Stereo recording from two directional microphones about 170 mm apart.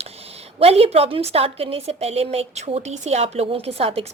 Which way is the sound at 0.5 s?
35° right (ahead or behind).